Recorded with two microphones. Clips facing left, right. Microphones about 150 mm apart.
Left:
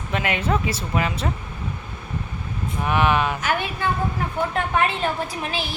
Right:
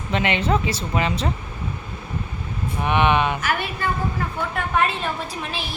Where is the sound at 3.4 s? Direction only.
15° left (ahead or behind).